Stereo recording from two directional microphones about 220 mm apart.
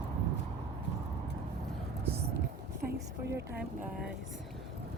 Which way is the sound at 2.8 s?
50° right (ahead or behind).